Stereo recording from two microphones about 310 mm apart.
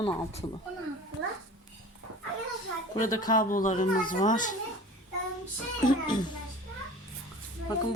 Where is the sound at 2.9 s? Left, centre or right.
Centre.